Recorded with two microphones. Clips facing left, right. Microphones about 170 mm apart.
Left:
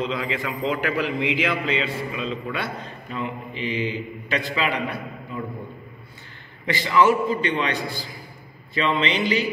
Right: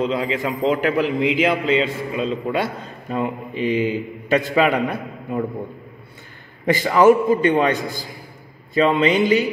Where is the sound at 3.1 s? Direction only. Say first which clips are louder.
Right 7 dB; 45° right (ahead or behind).